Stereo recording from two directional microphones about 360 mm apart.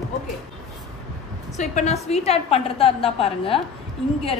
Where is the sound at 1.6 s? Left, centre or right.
Centre.